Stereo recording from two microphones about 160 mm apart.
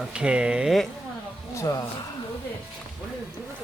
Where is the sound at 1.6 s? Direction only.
20° left (ahead or behind).